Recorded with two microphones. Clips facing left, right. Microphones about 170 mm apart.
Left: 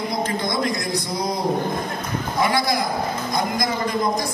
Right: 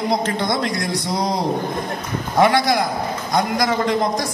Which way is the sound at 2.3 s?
75° right (ahead or behind).